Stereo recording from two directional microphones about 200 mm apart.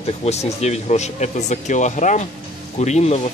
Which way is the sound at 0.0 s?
30° left (ahead or behind).